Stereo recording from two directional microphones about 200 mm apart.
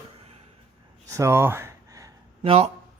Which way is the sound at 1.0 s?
15° right (ahead or behind).